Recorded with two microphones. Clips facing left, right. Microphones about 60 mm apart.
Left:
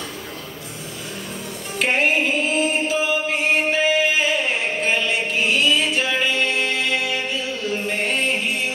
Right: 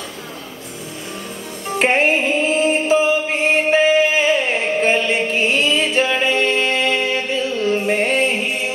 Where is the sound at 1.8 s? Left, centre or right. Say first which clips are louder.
Right 3 dB; right.